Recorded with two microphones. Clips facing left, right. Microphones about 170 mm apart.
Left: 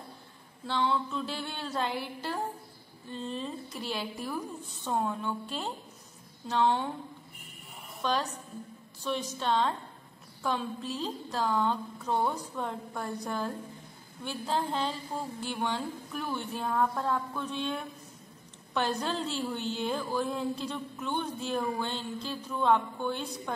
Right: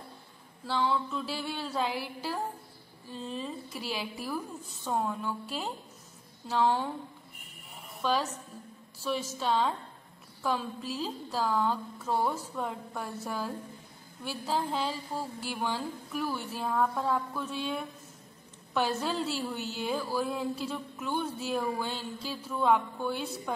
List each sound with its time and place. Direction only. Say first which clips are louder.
0.7 s a woman's voice: even; 5° right (ahead or behind)
8.0 s a woman's voice: right 1 dB; 5° right (ahead or behind)